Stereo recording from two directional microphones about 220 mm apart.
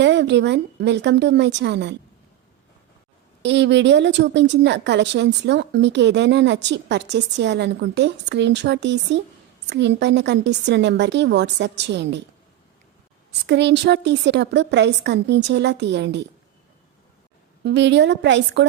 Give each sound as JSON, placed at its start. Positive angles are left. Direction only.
{"t": 0.0, "sound": "a woman's voice", "side_deg": -50}
{"t": 3.4, "sound": "a woman's voice", "side_deg": -55}
{"t": 13.5, "sound": "a woman's voice", "side_deg": -50}
{"t": 17.6, "sound": "a woman's voice", "side_deg": -50}